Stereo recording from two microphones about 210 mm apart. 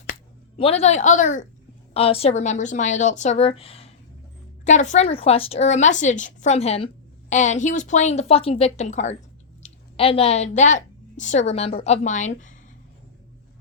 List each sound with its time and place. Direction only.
0.5 s a woman's voice: 30° left (ahead or behind)